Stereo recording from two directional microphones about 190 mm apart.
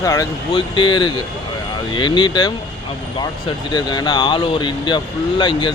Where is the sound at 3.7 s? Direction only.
25° left (ahead or behind).